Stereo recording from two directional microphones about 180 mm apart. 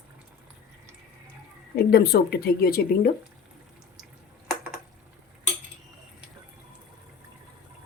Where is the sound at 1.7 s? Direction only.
60° left (ahead or behind).